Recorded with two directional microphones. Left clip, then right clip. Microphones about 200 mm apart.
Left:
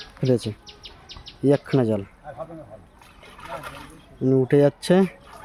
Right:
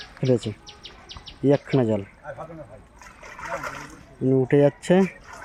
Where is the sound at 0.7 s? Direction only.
60° left (ahead or behind).